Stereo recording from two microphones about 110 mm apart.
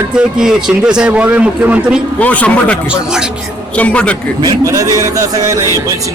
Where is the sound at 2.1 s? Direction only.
15° left (ahead or behind).